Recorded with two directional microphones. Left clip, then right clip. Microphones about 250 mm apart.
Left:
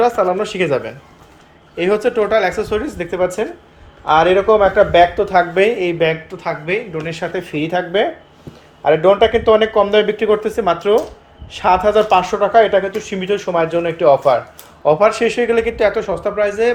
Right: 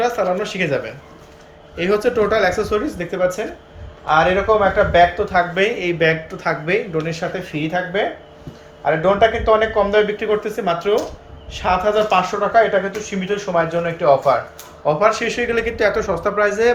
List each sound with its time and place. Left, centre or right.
0.0 s speech: left
4.0 s speech: left
8.8 s speech: left; by 16.7 s centre